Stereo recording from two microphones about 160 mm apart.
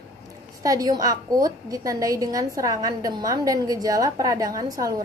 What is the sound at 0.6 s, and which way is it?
A woman's voice, 20° right (ahead or behind).